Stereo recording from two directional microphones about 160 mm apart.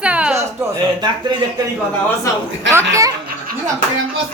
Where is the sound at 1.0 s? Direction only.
25° right (ahead or behind).